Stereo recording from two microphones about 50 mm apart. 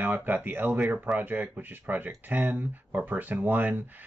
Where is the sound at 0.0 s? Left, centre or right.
Right.